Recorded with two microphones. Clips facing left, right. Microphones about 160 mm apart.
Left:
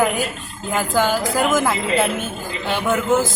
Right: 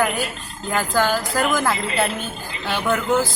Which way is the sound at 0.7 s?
10° left (ahead or behind).